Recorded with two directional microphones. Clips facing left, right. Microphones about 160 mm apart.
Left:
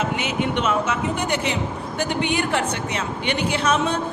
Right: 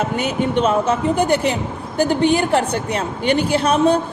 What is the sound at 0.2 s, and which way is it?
A man's voice, 35° right (ahead or behind).